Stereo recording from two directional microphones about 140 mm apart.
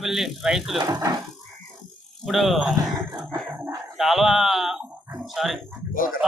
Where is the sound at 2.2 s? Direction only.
Centre (ahead or behind).